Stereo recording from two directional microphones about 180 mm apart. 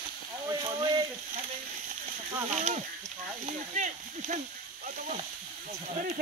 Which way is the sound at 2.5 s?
40° right (ahead or behind).